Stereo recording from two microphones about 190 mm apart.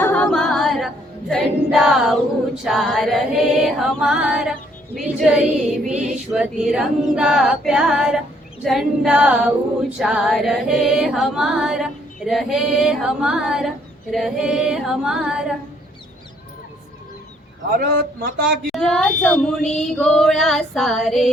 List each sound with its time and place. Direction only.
0.0 s singing: 10° left (ahead or behind)
1.3 s a capella: centre (ahead or behind)
17.7 s a man's voice: 50° right (ahead or behind)
18.7 s a capella: 5° left (ahead or behind)